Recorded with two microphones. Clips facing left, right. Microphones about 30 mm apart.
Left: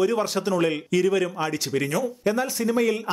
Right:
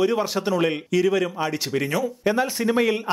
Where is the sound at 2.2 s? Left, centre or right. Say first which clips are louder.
Right 4 dB; right.